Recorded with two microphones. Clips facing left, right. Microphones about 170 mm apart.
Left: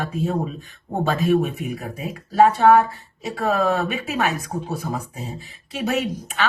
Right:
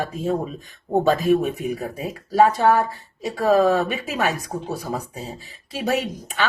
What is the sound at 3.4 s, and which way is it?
Speech, 35° right (ahead or behind).